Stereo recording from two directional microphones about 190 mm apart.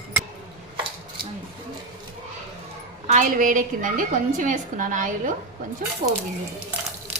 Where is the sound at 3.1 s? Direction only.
40° right (ahead or behind).